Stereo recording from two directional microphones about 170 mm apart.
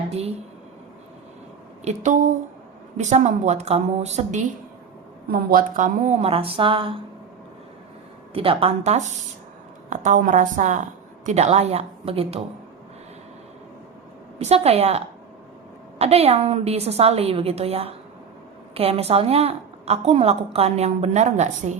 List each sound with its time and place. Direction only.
1.8 s speech: 45° right (ahead or behind)
5.3 s a woman's voice: 60° right (ahead or behind); by 7.0 s 30° right (ahead or behind)
8.3 s a woman's voice: 35° right (ahead or behind)
14.3 s a woman's voice: 35° right (ahead or behind)